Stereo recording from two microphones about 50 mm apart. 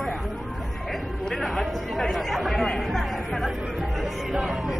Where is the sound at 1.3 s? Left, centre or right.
Centre.